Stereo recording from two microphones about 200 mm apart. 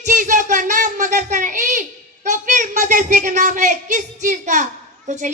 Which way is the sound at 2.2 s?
40° right (ahead or behind).